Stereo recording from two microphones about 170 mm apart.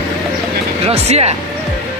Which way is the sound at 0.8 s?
40° right (ahead or behind).